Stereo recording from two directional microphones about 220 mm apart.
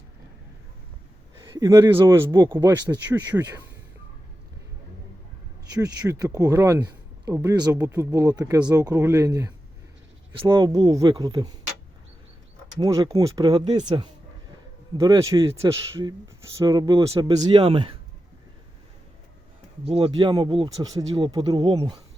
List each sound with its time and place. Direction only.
1.5 s speech: 15° right (ahead or behind)
3.3 s speech: 5° right (ahead or behind)
5.8 s speech: 15° right (ahead or behind)
12.8 s speech: 15° right (ahead or behind)
13.7 s speech: 30° right (ahead or behind)
14.9 s speech: 15° right (ahead or behind)
19.9 s speech: 25° right (ahead or behind)